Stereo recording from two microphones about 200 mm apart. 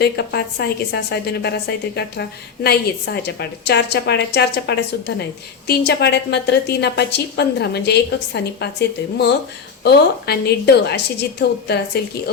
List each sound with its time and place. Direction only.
0.0 s a woman's voice: 55° left (ahead or behind)